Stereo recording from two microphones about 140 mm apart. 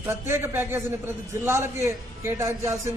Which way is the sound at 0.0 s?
15° right (ahead or behind).